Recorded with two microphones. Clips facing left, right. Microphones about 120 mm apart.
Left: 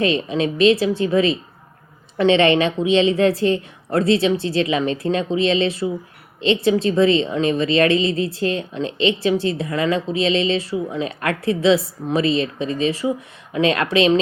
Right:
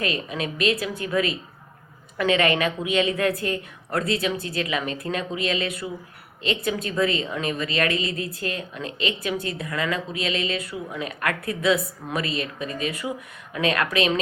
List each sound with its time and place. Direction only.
0.0 s a woman's voice: 30° left (ahead or behind)